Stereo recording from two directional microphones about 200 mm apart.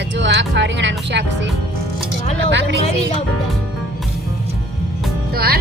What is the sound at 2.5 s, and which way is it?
Speech, 60° right (ahead or behind).